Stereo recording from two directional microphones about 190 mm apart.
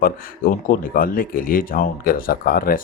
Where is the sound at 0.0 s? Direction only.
50° left (ahead or behind).